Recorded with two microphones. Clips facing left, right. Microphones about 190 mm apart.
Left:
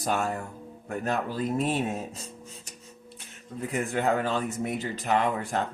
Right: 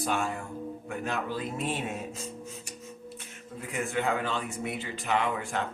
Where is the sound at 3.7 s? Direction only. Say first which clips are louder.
Left 3 dB; 40° left (ahead or behind).